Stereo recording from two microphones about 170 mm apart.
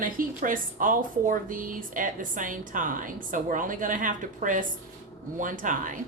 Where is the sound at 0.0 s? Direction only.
55° right (ahead or behind).